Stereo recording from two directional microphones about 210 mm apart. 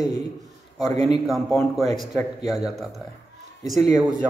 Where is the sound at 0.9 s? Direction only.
20° left (ahead or behind).